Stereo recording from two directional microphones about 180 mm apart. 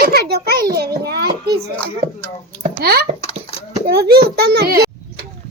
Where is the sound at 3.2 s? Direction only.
30° left (ahead or behind).